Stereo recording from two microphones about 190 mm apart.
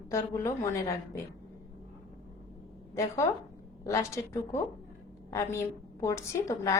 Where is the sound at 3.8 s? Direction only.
15° left (ahead or behind).